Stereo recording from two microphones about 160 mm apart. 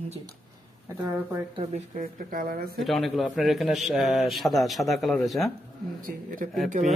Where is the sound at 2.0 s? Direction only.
60° right (ahead or behind).